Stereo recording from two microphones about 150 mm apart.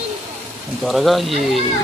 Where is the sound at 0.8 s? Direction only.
Centre (ahead or behind).